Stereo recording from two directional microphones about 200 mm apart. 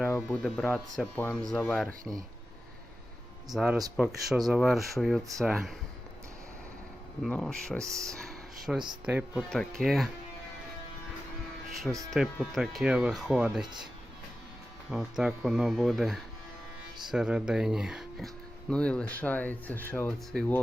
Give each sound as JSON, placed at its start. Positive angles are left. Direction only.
{"t": 0.4, "sound": "speech", "side_deg": 5}
{"t": 3.5, "sound": "speech", "side_deg": -5}
{"t": 7.2, "sound": "speech", "side_deg": 5}
{"t": 7.8, "sound": "speech", "side_deg": -15}
{"t": 8.2, "sound": "a sound", "side_deg": 0}
{"t": 9.0, "sound": "speech", "side_deg": -5}
{"t": 12.1, "sound": "speech", "side_deg": 0}
{"t": 14.8, "sound": "speech", "side_deg": -5}